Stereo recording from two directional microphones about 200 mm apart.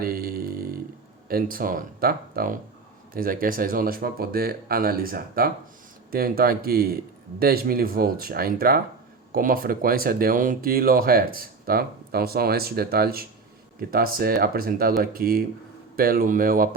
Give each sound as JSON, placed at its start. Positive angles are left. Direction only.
{"t": 0.0, "sound": "mantra", "side_deg": -50}
{"t": 1.3, "sound": "speech", "side_deg": -45}